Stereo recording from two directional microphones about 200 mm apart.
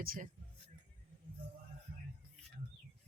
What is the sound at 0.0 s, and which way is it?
Speech, 45° right (ahead or behind).